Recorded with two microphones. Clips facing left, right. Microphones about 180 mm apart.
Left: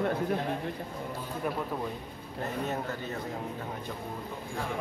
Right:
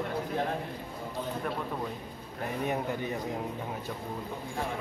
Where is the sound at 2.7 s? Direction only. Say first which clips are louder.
Right 3 dB; 15° right (ahead or behind).